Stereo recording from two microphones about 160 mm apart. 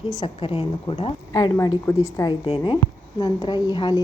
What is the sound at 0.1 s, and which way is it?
A woman's voice, 30° left (ahead or behind).